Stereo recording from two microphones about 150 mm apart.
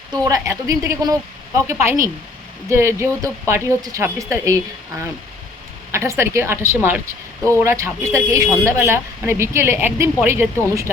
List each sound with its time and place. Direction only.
0.1 s a woman's voice: 20° right (ahead or behind)
5.9 s speech: 15° right (ahead or behind)